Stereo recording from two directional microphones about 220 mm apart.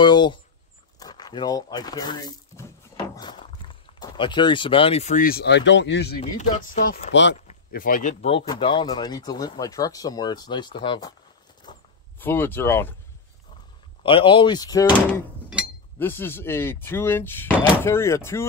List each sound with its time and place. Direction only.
0.0 s a sound: 20° left (ahead or behind)
0.9 s speech: 15° left (ahead or behind); by 7.0 s 40° left (ahead or behind)
7.1 s speech: 55° left (ahead or behind)
7.4 s speech: 40° left (ahead or behind); by 11.1 s 20° left (ahead or behind)
11.7 s a sound: 20° left (ahead or behind)
12.2 s speech: 10° left (ahead or behind)
14.0 s speech: 20° left (ahead or behind)
16.0 s speech: 10° left (ahead or behind)